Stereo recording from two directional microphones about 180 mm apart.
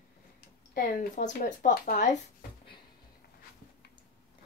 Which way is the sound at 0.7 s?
50° left (ahead or behind).